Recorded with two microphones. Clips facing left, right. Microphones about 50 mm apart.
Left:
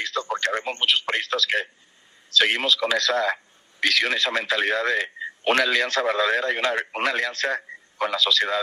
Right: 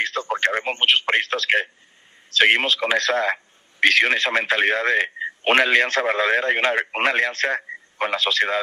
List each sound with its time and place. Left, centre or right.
0.0 s radio: right
2.3 s speech: right